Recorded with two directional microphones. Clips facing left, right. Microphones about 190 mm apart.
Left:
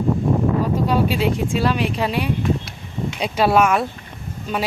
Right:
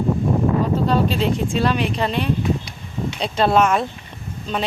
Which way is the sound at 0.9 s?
10° left (ahead or behind).